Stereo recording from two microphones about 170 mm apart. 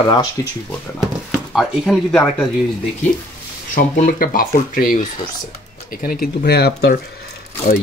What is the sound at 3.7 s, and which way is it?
Speech, 60° left (ahead or behind).